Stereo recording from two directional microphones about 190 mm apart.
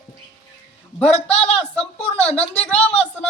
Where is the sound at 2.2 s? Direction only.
10° left (ahead or behind).